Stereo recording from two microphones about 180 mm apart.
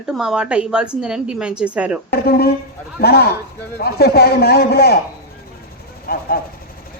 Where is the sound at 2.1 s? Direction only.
60° left (ahead or behind).